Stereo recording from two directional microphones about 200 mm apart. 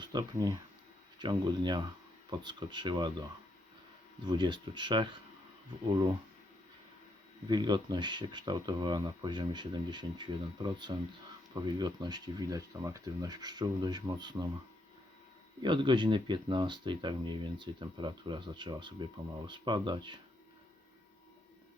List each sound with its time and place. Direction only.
0.0 s speech: 20° right (ahead or behind)
4.3 s speech: 20° right (ahead or behind)
7.4 s speech: 20° right (ahead or behind)
15.6 s speech: 25° right (ahead or behind)